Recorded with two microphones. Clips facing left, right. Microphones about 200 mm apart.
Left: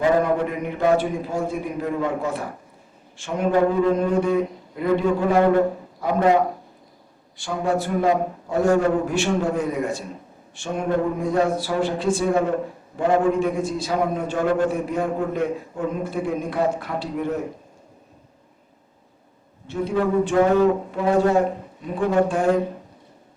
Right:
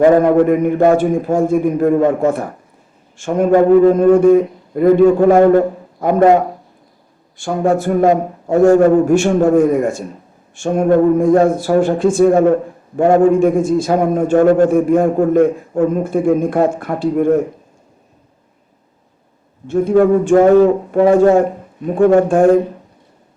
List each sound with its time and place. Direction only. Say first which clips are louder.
0.0 s a man's voice: right 10 dB; 50° right (ahead or behind)
19.6 s a man's voice: right 11 dB; 50° right (ahead or behind)